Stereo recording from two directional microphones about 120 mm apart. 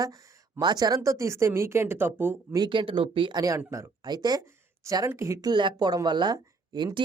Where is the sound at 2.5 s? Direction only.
40° right (ahead or behind).